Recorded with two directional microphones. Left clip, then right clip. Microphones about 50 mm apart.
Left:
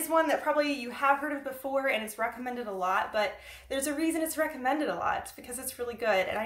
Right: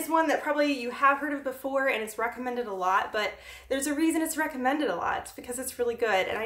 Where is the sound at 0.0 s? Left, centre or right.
Centre.